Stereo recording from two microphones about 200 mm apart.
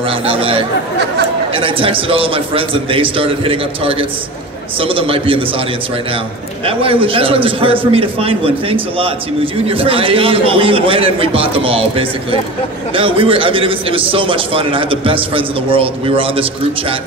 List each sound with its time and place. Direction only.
0.0 s a man's voice: 25° right (ahead or behind)
6.6 s a man's voice: 25° right (ahead or behind)